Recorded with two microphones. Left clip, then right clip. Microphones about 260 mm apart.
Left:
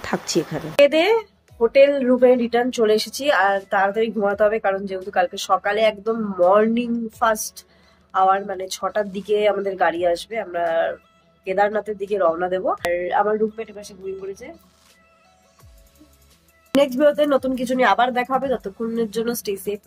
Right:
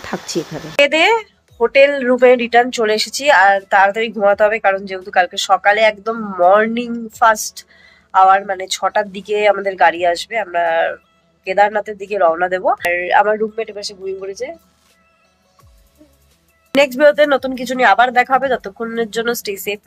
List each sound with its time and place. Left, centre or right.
0.0 s speech: centre
13.0 s a man's voice: centre
16.9 s speech: centre